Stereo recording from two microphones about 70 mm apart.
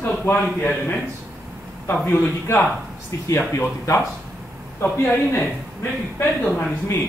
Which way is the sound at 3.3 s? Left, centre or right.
Left.